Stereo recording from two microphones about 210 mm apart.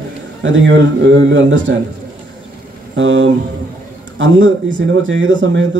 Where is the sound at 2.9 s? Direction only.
60° right (ahead or behind).